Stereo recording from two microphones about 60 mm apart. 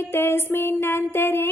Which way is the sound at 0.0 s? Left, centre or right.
Left.